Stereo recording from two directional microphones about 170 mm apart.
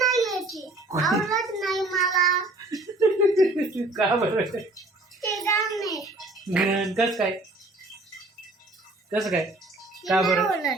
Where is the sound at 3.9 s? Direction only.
25° right (ahead or behind).